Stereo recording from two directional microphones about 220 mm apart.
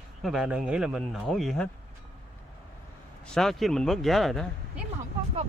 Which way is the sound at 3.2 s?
Centre (ahead or behind).